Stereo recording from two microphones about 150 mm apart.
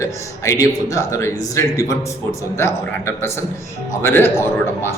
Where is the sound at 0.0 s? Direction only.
20° left (ahead or behind).